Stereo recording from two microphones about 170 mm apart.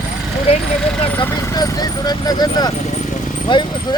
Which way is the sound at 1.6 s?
20° left (ahead or behind).